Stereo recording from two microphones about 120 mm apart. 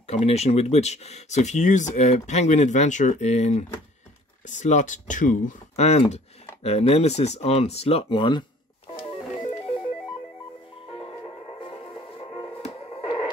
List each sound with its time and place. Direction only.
0.0 s speech: 60° left (ahead or behind)
4.5 s speech: 90° left; by 8.5 s 40° left (ahead or behind)
11.6 s music: 45° left (ahead or behind)
12.6 s music: 55° left (ahead or behind)